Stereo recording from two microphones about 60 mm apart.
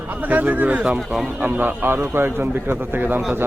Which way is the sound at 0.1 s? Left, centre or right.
Right.